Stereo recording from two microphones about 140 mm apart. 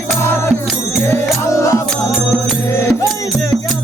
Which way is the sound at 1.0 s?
20° left (ahead or behind).